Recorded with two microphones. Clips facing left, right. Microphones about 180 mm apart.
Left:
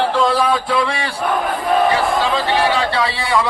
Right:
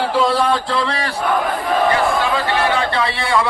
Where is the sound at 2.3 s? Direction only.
15° left (ahead or behind).